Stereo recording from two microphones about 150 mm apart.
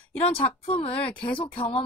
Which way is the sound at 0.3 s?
40° left (ahead or behind).